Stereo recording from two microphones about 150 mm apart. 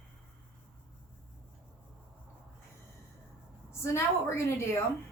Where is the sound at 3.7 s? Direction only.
20° left (ahead or behind).